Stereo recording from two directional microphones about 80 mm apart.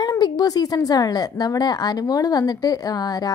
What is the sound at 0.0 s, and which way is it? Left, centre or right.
A woman's voice, left.